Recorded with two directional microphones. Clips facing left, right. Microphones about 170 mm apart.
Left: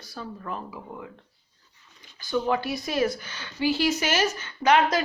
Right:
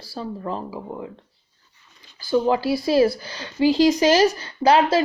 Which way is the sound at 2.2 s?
30° right (ahead or behind).